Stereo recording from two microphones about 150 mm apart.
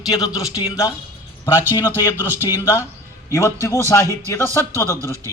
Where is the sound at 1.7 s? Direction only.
20° left (ahead or behind).